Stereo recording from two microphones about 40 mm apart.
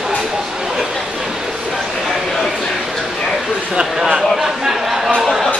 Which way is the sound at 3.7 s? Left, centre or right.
Centre.